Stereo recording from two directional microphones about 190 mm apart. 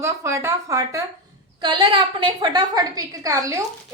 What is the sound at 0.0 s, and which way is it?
A woman's voice, 15° right (ahead or behind).